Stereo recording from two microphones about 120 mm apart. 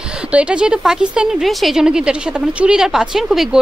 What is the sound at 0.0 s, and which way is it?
A woman's voice, 10° right (ahead or behind).